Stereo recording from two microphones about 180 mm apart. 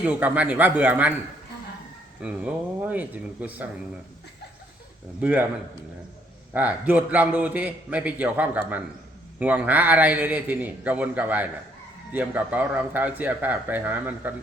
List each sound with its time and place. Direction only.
0.0 s a man's voice: 10° right (ahead or behind)
2.2 s a man's voice: 5° right (ahead or behind)
5.2 s a man's voice: 10° right (ahead or behind)
6.5 s a man's voice: 10° right (ahead or behind)